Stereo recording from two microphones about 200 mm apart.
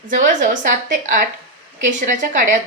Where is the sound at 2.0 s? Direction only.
40° right (ahead or behind).